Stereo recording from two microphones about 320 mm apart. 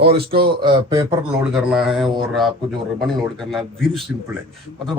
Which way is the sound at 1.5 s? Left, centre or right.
Centre.